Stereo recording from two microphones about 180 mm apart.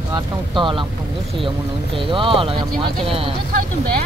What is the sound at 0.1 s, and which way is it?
Speech, 25° right (ahead or behind).